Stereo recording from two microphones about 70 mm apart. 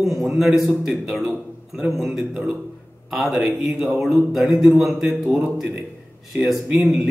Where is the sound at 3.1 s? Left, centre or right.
Centre.